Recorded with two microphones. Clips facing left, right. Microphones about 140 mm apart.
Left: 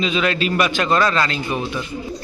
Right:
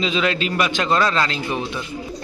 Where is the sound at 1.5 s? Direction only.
10° left (ahead or behind).